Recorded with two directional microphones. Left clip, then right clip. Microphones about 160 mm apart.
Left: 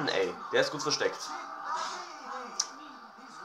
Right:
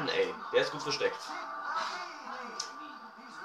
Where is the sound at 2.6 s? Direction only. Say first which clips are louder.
Left 5 dB; 55° left (ahead or behind).